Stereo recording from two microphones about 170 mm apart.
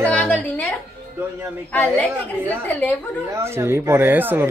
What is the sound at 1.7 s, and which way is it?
A woman's voice, 10° left (ahead or behind).